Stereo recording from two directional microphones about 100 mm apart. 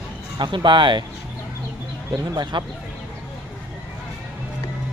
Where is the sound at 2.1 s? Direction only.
50° right (ahead or behind).